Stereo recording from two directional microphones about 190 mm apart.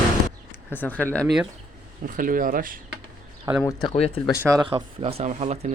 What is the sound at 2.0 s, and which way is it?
Speech, 45° right (ahead or behind).